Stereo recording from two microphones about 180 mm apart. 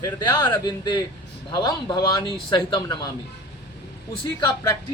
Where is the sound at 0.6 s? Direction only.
25° left (ahead or behind).